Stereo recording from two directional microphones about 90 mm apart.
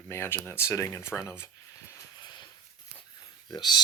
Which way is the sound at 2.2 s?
55° left (ahead or behind).